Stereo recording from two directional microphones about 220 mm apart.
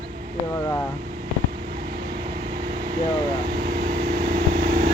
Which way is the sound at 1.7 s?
45° right (ahead or behind).